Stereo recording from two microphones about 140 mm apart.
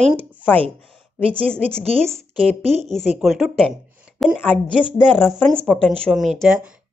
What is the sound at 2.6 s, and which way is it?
Speech, 50° right (ahead or behind).